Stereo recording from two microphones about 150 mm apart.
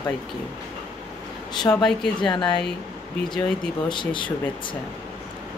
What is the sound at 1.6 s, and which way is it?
Speech, 30° left (ahead or behind).